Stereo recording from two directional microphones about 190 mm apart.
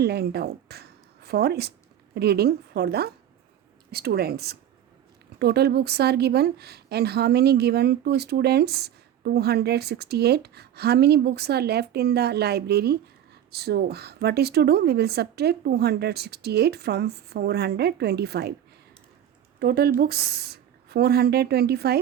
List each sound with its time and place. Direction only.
0.0 s a woman's voice: 60° right (ahead or behind)
19.5 s a woman's voice: 55° right (ahead or behind)